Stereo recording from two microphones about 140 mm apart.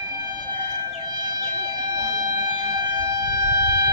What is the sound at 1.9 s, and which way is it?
Siren, 25° right (ahead or behind).